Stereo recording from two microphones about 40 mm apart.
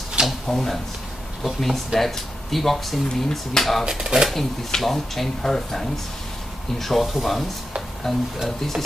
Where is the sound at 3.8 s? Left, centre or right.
Centre.